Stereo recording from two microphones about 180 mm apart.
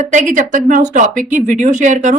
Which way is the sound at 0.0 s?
45° right (ahead or behind).